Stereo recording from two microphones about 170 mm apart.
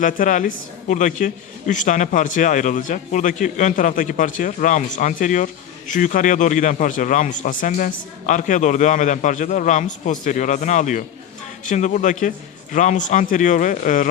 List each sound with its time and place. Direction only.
0.0 s a man's voice: 50° left (ahead or behind)